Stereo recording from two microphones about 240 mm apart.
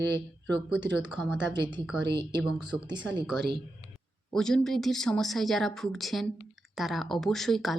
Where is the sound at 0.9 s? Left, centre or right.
Centre.